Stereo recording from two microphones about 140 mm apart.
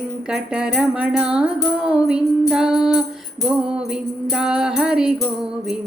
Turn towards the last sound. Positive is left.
turn(degrees=-5)  # may be behind; listen again after turning